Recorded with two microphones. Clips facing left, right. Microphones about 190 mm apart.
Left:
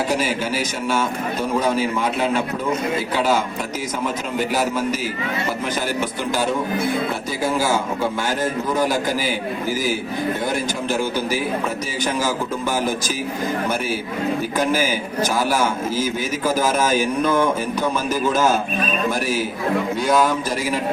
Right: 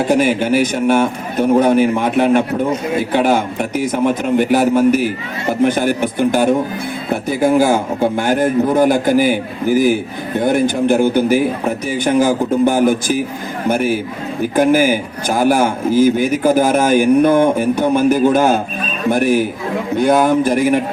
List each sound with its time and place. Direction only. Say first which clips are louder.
0.1 s speech: right 8 dB; 60° right (ahead or behind)
14.5 s speech: right 12 dB; 55° right (ahead or behind)